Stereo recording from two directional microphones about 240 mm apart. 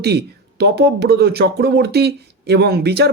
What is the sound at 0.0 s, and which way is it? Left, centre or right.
A man's voice, right.